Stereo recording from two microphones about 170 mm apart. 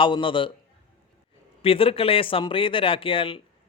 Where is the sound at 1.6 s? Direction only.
35° left (ahead or behind).